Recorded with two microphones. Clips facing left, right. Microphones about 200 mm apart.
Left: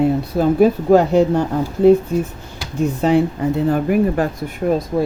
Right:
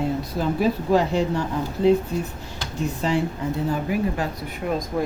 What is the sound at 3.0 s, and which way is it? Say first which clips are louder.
Speech: left 8 dB; 60° left (ahead or behind).